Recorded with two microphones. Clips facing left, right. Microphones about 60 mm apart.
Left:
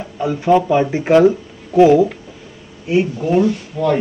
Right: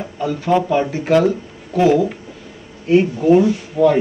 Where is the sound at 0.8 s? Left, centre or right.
Left.